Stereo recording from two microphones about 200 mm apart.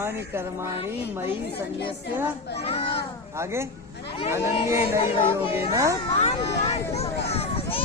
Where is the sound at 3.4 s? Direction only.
15° right (ahead or behind).